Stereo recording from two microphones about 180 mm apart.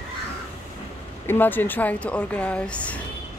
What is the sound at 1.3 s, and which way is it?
Speech, 10° left (ahead or behind).